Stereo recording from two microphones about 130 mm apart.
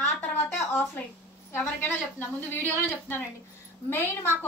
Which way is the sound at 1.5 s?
15° left (ahead or behind).